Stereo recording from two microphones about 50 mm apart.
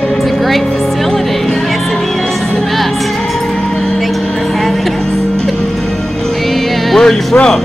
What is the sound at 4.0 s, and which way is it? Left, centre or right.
Music, centre.